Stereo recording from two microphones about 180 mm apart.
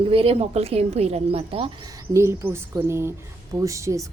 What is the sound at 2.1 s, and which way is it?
A woman's voice, 15° right (ahead or behind).